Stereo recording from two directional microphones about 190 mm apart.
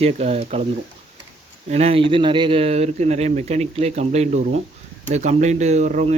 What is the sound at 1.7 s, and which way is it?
Speech, 35° right (ahead or behind).